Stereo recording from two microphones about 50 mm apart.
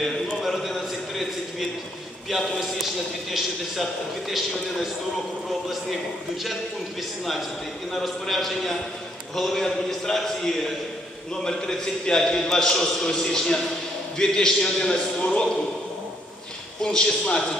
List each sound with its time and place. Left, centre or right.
0.4 s a sound: centre
2.2 s a man's voice: centre
7.9 s a man's voice: centre
16.9 s a man's voice: centre